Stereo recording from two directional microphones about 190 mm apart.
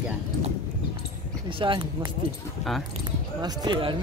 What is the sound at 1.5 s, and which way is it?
Speech, 25° right (ahead or behind).